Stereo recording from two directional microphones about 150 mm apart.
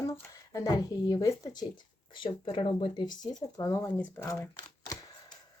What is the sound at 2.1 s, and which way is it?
Speech, 35° left (ahead or behind).